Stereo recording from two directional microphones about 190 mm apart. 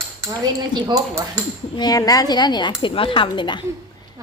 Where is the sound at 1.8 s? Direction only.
20° left (ahead or behind).